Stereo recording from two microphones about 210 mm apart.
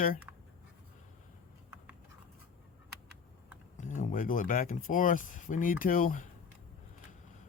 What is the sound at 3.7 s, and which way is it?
Speech, 35° left (ahead or behind).